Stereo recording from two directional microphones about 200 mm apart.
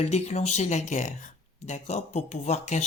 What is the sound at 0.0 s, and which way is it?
Speech, 30° left (ahead or behind).